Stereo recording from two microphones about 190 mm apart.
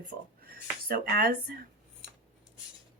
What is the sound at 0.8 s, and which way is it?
Speech, 50° right (ahead or behind).